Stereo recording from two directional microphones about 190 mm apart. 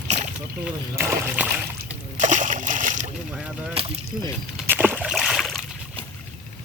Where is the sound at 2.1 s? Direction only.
40° right (ahead or behind).